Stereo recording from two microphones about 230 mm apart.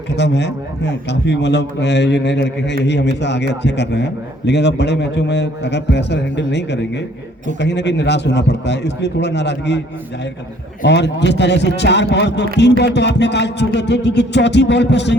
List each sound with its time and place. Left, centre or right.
0.1 s a man's voice: left
10.8 s a man's voice: left